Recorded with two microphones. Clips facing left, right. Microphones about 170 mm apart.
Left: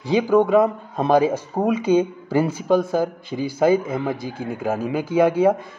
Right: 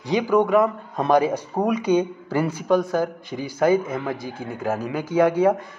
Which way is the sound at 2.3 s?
25° left (ahead or behind).